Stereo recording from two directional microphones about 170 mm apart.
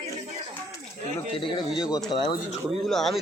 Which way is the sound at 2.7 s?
Centre (ahead or behind).